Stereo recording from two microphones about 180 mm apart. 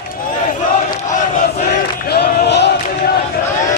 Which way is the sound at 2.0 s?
65° left (ahead or behind).